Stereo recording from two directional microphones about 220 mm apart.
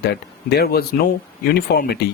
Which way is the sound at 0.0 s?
45° left (ahead or behind).